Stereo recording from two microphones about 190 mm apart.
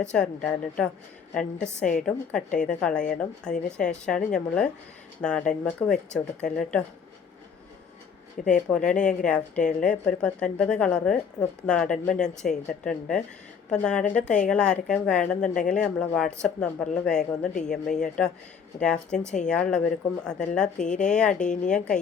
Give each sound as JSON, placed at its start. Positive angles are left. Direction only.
{"t": 0.0, "sound": "speech", "side_deg": 5}
{"t": 8.4, "sound": "speech", "side_deg": 45}
{"t": 8.7, "sound": "speech", "side_deg": 5}